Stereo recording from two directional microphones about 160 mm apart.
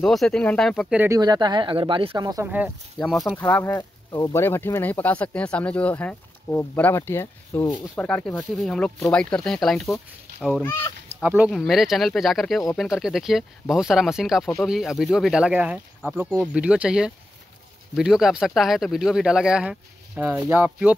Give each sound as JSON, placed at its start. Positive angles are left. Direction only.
{"t": 0.0, "sound": "speech", "side_deg": 0}
{"t": 0.9, "sound": "speech", "side_deg": -15}
{"t": 2.4, "sound": "speech", "side_deg": -10}
{"t": 3.3, "sound": "speech", "side_deg": 10}